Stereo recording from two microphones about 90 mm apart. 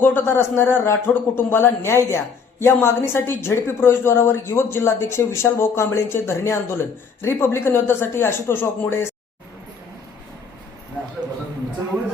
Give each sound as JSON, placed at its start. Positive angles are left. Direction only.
{"t": 0.0, "sound": "a woman's voice", "side_deg": 25}